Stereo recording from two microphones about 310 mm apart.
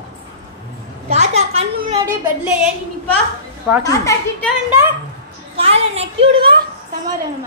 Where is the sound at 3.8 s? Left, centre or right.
Centre.